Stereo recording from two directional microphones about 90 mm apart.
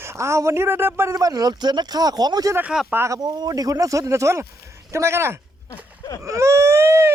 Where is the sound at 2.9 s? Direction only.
30° right (ahead or behind).